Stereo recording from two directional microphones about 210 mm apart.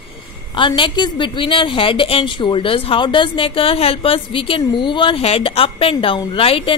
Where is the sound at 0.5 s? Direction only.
25° left (ahead or behind).